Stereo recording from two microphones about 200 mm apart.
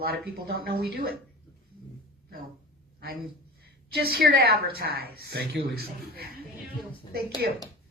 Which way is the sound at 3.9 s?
50° right (ahead or behind).